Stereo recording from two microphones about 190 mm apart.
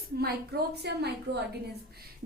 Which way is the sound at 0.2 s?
60° right (ahead or behind).